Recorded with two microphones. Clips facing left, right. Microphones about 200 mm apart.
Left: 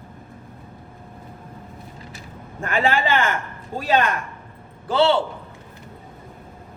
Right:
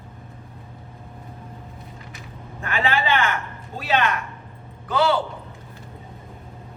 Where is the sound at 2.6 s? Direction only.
45° left (ahead or behind).